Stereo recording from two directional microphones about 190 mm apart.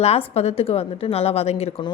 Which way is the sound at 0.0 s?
35° left (ahead or behind).